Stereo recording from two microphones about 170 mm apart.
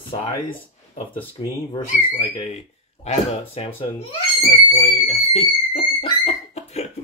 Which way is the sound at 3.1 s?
35° left (ahead or behind).